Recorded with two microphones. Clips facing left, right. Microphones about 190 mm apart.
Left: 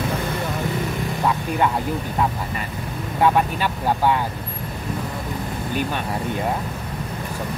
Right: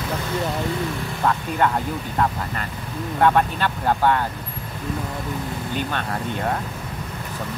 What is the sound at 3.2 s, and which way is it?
Speech, 5° left (ahead or behind).